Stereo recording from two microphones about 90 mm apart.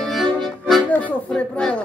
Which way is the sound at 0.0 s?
5° left (ahead or behind).